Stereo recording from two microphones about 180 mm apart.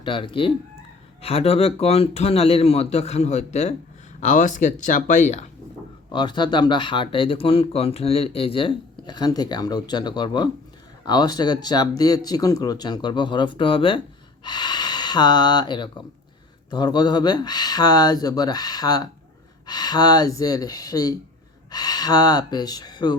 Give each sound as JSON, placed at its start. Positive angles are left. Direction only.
{"t": 0.0, "sound": "speech", "side_deg": 30}
{"t": 6.1, "sound": "speech", "side_deg": 25}